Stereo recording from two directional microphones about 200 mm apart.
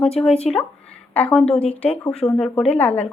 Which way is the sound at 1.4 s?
30° left (ahead or behind).